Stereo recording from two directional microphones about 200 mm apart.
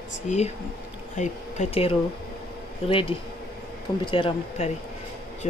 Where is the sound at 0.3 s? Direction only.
35° left (ahead or behind).